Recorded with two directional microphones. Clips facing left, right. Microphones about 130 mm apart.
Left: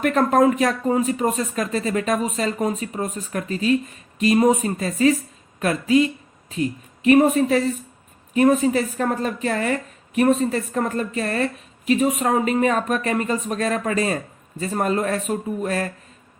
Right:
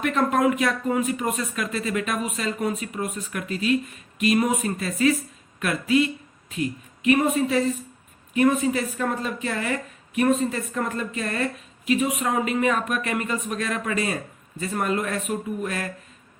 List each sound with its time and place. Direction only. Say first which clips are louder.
0.0 s speech: left 4 dB; 40° left (ahead or behind)